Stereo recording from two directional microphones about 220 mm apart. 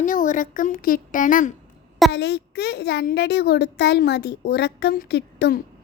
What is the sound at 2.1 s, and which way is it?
A child's voice, 50° left (ahead or behind).